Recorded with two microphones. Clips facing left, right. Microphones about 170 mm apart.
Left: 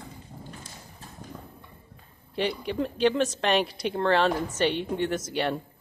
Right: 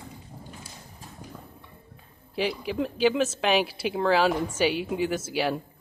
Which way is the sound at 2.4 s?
Centre (ahead or behind).